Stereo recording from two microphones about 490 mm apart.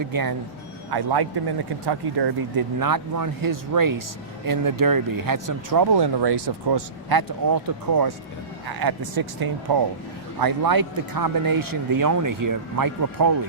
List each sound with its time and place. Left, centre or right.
0.0 s speech: right